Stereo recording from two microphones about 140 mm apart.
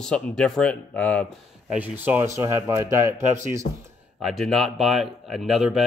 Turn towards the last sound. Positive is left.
turn(degrees=0)  # may be behind; listen again after turning